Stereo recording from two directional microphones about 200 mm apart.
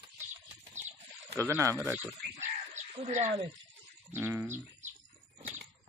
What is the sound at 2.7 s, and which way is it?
Bird, 35° right (ahead or behind).